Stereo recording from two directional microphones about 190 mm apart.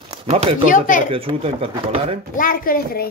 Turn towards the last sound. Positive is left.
turn(degrees=50)  # may be behind; listen again after turning